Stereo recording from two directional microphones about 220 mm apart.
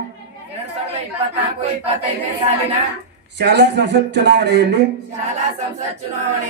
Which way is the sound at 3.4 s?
50° right (ahead or behind).